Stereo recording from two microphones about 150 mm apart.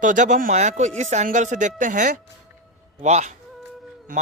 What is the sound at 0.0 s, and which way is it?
Speech, 55° right (ahead or behind).